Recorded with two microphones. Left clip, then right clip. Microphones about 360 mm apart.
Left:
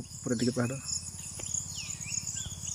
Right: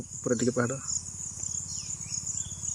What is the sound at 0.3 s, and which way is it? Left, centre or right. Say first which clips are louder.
Speech: right 4 dB; centre.